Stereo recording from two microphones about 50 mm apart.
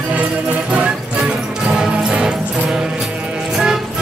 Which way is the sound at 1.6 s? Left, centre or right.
Centre.